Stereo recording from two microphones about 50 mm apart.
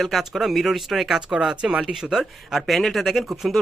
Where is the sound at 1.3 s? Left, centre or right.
Centre.